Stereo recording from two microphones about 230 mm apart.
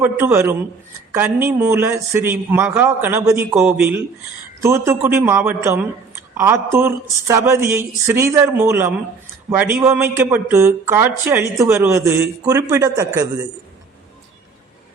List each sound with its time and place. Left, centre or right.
0.0 s speech: centre